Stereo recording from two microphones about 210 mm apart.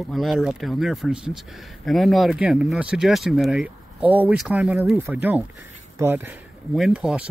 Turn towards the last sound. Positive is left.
turn(degrees=-5)  # may be behind; listen again after turning